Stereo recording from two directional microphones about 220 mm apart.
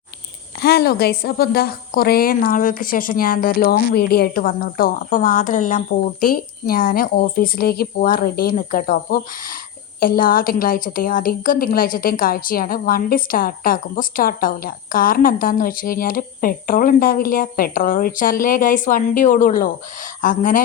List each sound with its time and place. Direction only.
0.6 s a woman's voice: 45° left (ahead or behind)